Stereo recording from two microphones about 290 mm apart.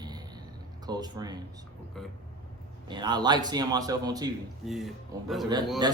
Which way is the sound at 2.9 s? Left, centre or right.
Centre.